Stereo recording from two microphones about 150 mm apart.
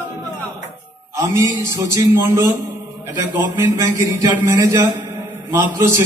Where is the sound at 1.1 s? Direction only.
20° right (ahead or behind).